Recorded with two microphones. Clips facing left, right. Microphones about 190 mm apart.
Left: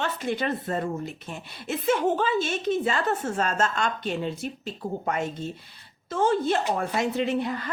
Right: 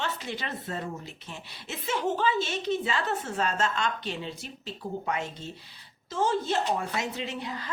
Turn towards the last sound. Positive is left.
turn(degrees=55)  # may be behind; listen again after turning